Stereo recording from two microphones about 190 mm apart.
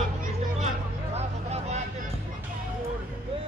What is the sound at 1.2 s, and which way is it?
Vehicle, 35° right (ahead or behind).